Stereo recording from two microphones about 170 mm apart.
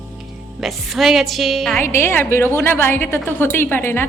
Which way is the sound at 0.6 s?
Centre (ahead or behind).